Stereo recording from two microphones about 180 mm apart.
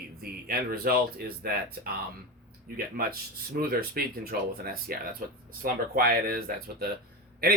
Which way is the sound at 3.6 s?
55° right (ahead or behind).